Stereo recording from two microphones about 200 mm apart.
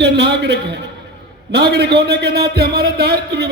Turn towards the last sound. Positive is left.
turn(degrees=-55)  # may be behind; listen again after turning